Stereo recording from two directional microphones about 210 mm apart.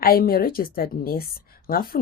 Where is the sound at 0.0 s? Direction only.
45° left (ahead or behind).